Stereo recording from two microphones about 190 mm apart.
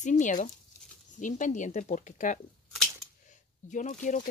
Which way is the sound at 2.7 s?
Centre (ahead or behind).